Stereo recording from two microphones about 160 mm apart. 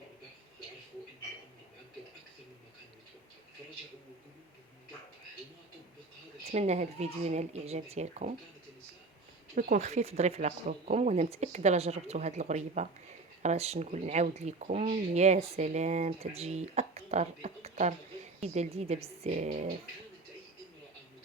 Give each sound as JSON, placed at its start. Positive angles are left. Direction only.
{"t": 6.4, "sound": "speech", "side_deg": -45}
{"t": 9.6, "sound": "speech", "side_deg": -50}